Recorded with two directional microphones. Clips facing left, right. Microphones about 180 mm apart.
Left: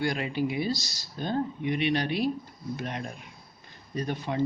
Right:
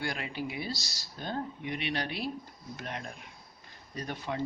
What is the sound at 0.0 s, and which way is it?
Speech, 20° left (ahead or behind).